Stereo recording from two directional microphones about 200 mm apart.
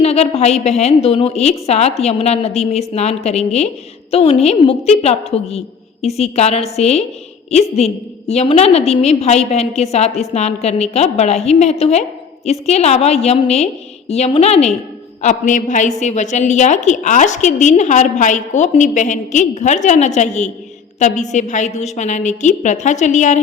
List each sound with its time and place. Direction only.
0.0 s a woman's voice: 30° left (ahead or behind)